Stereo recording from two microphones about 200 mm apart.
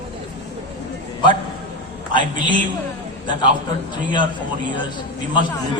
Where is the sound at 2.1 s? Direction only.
25° left (ahead or behind).